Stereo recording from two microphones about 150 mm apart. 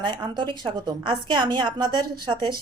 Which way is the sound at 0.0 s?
30° right (ahead or behind).